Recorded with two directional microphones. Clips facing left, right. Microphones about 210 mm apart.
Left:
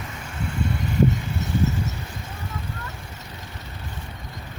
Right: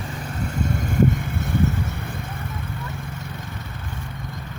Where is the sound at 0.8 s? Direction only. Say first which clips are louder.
Right 1 dB; 50° right (ahead or behind).